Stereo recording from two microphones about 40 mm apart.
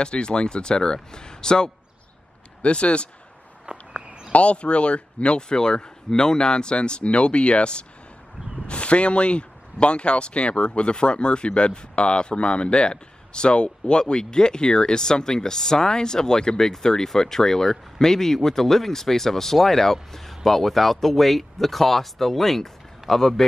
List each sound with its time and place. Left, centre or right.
0.0 s speech: left
3.7 s walk: right
4.3 s speech: left; by 23.4 s centre